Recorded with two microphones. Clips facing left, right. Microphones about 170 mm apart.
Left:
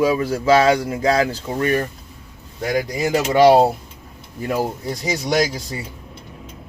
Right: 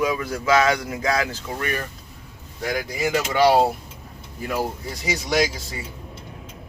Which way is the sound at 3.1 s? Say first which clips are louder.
Left 5 dB; 40° left (ahead or behind).